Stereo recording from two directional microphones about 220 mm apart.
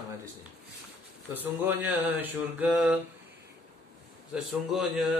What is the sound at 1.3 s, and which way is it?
Speech, 10° right (ahead or behind).